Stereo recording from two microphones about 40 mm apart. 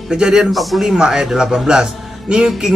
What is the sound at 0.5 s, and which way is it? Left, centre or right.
Speech, centre.